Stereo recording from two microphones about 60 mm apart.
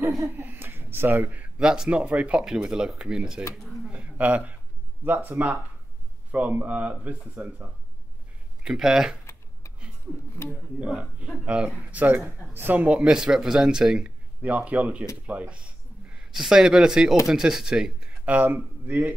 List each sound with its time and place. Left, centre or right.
0.4 s a sound: right
1.6 s speech: centre
3.5 s a sound: centre
3.9 s a sound: right
5.0 s speech: right
6.3 s speech: right
8.6 s speech: centre
10.5 s speech: right
14.0 s speech: right
15.2 s a sound: right
16.3 s speech: centre
18.2 s speech: right